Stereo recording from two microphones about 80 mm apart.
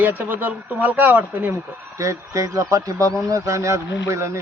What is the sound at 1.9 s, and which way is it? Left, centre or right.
A man's voice, right.